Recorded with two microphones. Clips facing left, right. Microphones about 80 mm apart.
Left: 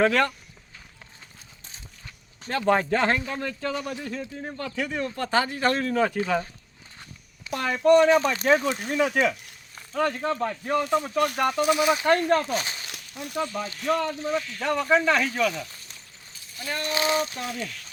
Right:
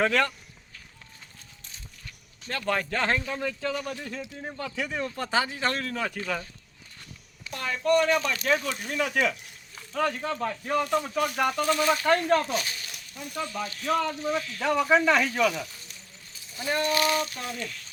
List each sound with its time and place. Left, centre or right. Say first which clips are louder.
0.1 s speech: left 2 dB; centre
2.5 s speech: left 6 dB; left; by 5.6 s centre
5.6 s speech: left 6 dB; centre
7.5 s speech: left 5 dB; left
7.9 s speech: left 6 dB; left
8.9 s speech: left 3 dB; centre
11.5 s speech: left 3 dB; centre
12.1 s speech: left 1 dB; centre
12.5 s speech: left 2 dB; left
13.8 s speech: left 1 dB; centre
16.6 s speech: right 4 dB; right
16.8 s speech: left 2 dB; left